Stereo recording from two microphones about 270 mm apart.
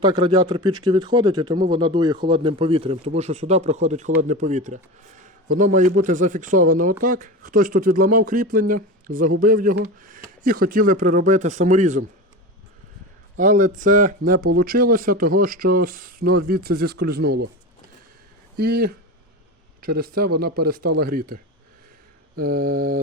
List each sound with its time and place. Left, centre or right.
0.0 s speech: centre
13.3 s speech: right
18.5 s speech: right
22.4 s speech: right